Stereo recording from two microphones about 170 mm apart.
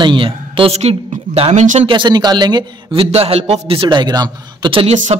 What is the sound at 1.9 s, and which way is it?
A man's voice, 25° right (ahead or behind).